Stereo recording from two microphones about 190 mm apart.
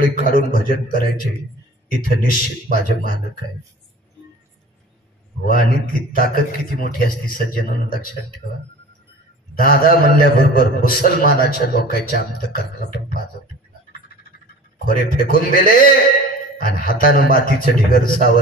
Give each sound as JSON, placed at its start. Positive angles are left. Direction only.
{"t": 0.3, "sound": "a man's voice", "side_deg": 50}
{"t": 5.4, "sound": "a man's voice", "side_deg": 50}
{"t": 9.6, "sound": "a man's voice", "side_deg": 50}
{"t": 14.9, "sound": "a man's voice", "side_deg": 50}